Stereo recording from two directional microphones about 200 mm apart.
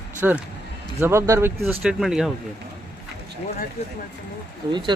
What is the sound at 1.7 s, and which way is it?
Speech, centre (ahead or behind).